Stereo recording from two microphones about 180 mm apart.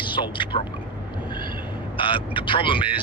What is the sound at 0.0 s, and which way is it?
Speech, 25° left (ahead or behind).